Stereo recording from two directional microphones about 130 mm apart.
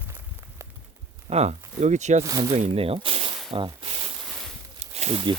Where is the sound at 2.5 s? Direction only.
50° right (ahead or behind).